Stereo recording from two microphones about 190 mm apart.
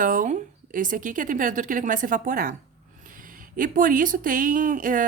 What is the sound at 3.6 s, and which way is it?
Speech, 45° right (ahead or behind).